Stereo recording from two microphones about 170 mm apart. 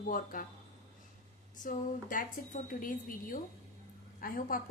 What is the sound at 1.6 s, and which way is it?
A woman's voice, 50° left (ahead or behind).